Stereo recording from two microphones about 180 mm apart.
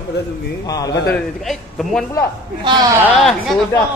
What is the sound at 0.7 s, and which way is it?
Speech, 20° left (ahead or behind).